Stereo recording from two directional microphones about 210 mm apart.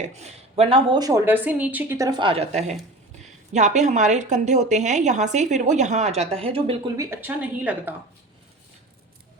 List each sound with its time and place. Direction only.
0.0 s a woman's voice: 30° right (ahead or behind)
6.9 s a woman's voice: 15° right (ahead or behind)